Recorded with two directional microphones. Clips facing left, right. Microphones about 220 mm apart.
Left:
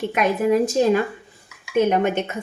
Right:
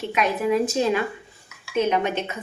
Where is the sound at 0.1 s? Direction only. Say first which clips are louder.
Left 2 dB; 45° left (ahead or behind).